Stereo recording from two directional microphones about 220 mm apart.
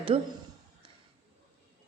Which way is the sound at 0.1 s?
25° right (ahead or behind).